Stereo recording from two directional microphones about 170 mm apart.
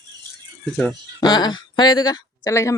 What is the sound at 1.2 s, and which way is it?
Speech, 25° left (ahead or behind).